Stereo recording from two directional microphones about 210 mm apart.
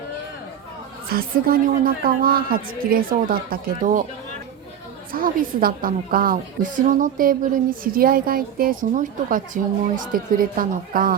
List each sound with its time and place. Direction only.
1.1 s a woman's voice: 45° right (ahead or behind)
5.1 s a woman's voice: 40° right (ahead or behind)